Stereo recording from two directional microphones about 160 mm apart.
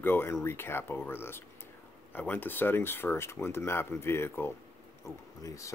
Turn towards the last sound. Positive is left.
turn(degrees=20)  # may be behind; listen again after turning